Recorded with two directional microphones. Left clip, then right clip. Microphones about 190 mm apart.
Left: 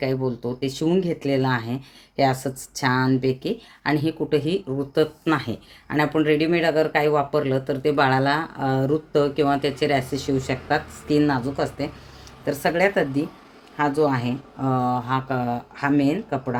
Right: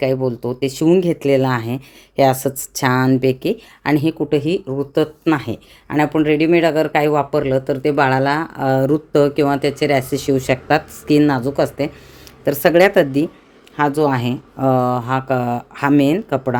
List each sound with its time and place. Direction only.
0.0 s speech: 40° right (ahead or behind); by 16.6 s 55° right (ahead or behind)